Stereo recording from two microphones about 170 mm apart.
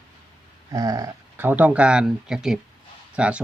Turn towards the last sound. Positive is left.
turn(degrees=-5)  # may be behind; listen again after turning